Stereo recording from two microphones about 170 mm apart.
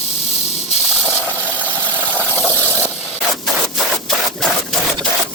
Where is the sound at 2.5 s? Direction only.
15° right (ahead or behind).